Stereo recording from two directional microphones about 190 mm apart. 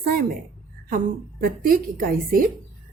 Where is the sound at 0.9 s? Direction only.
50° right (ahead or behind).